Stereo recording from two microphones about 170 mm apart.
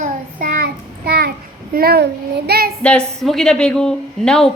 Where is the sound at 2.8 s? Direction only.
5° left (ahead or behind).